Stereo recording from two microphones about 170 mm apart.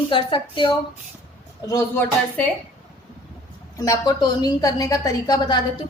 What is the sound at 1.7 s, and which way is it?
Speech, 10° left (ahead or behind).